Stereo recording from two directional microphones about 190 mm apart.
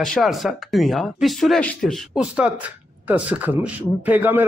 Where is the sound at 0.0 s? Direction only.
Centre (ahead or behind).